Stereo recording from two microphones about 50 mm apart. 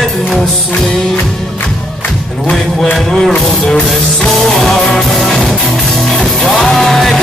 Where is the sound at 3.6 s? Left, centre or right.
Centre.